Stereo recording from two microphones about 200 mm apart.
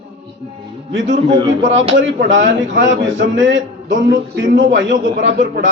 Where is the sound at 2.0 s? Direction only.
65° right (ahead or behind).